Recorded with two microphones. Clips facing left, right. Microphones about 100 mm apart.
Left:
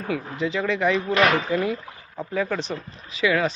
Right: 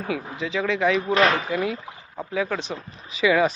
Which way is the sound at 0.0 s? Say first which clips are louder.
Left 2 dB; 5° right (ahead or behind).